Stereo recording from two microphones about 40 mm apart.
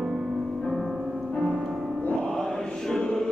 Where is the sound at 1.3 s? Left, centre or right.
Left.